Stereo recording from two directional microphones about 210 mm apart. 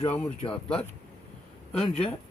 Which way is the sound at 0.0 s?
10° left (ahead or behind).